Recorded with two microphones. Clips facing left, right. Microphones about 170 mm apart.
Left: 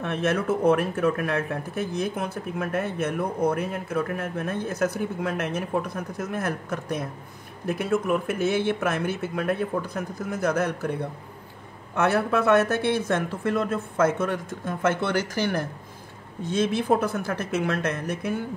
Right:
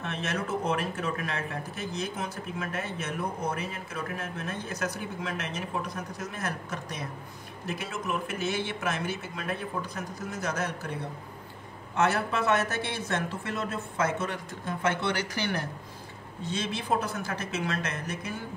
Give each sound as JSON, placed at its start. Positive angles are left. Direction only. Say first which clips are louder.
{"t": 0.0, "sound": "speech", "louder": "left 8 dB", "side_deg": 55}